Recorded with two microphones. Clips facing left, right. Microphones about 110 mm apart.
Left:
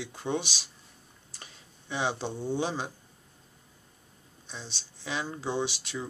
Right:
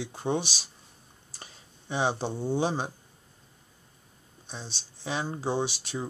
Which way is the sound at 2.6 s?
35° right (ahead or behind).